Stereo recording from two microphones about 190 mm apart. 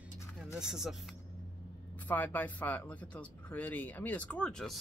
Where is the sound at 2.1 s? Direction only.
10° left (ahead or behind).